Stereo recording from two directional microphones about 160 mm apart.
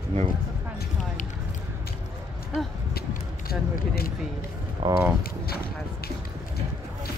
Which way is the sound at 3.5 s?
70° left (ahead or behind).